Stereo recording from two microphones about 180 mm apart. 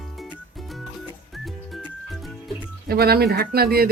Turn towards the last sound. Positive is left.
turn(degrees=-60)  # may be behind; listen again after turning